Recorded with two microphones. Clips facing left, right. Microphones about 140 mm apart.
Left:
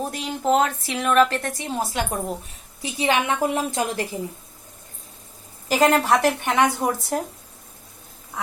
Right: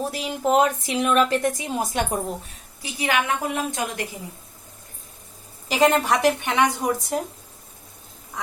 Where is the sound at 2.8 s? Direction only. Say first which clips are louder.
Left 2 dB; 25° left (ahead or behind).